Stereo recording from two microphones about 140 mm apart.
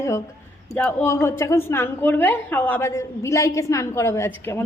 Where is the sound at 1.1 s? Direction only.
20° left (ahead or behind).